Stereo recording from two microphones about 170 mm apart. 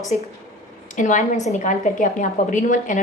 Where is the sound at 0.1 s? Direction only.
45° left (ahead or behind).